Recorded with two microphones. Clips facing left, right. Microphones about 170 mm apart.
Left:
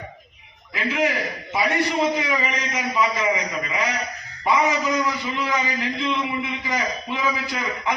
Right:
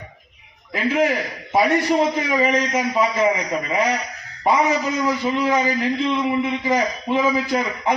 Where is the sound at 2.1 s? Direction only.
45° right (ahead or behind).